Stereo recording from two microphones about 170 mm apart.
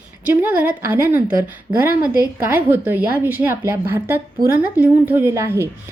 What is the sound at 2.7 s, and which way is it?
A woman's voice, 10° right (ahead or behind).